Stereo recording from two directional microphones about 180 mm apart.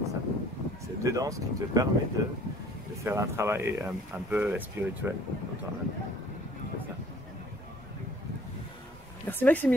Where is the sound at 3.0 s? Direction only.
15° right (ahead or behind).